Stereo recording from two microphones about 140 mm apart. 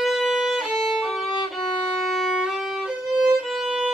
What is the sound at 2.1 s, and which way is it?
Violin, centre (ahead or behind).